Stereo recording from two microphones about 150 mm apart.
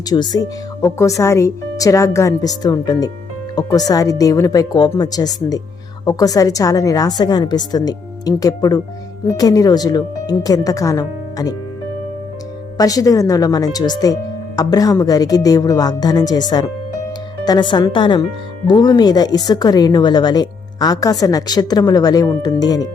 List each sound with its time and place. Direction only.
0.1 s a woman's voice: 30° left (ahead or behind)
12.7 s a woman's voice: 25° left (ahead or behind)
17.4 s a woman's voice: 30° left (ahead or behind)